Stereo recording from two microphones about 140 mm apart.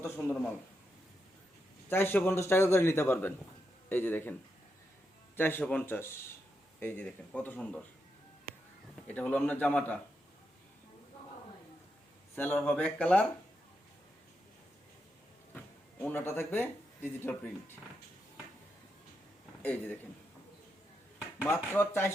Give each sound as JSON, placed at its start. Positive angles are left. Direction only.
{"t": 0.0, "sound": "a man's voice", "side_deg": 15}
{"t": 1.9, "sound": "a man's voice", "side_deg": 15}
{"t": 5.4, "sound": "a man's voice", "side_deg": 15}
{"t": 9.0, "sound": "a man's voice", "side_deg": 10}
{"t": 12.4, "sound": "a man's voice", "side_deg": 10}
{"t": 15.5, "sound": "speech", "side_deg": 10}
{"t": 19.6, "sound": "a man's voice", "side_deg": 10}
{"t": 21.4, "sound": "a man's voice", "side_deg": 15}